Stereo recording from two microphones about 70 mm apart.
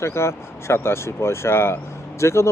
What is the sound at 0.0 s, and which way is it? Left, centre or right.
Speech, left.